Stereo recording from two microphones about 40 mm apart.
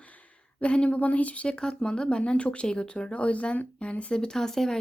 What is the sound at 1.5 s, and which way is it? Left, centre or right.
Speech, left.